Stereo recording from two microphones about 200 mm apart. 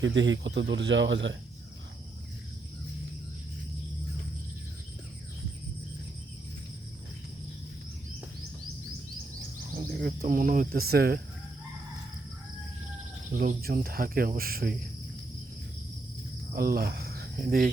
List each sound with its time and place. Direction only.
0.0 s a man's voice: 65° right (ahead or behind)
10.0 s speech: 45° right (ahead or behind)
13.3 s speech: 45° right (ahead or behind)
16.6 s speech: 50° right (ahead or behind)